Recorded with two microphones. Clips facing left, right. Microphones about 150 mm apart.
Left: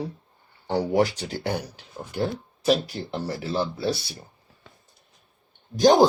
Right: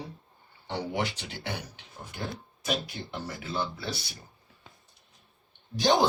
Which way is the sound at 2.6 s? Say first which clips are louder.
Left 10 dB; 35° left (ahead or behind).